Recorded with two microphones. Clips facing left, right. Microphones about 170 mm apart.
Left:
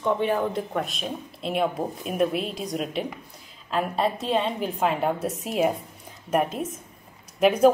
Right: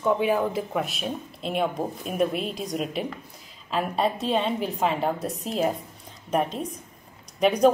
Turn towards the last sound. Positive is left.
turn(degrees=5)  # may be behind; listen again after turning